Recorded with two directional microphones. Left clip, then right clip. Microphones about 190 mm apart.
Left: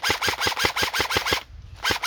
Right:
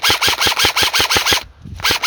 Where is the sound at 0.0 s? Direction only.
50° right (ahead or behind).